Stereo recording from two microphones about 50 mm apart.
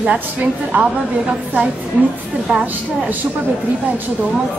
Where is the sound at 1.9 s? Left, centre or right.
Right.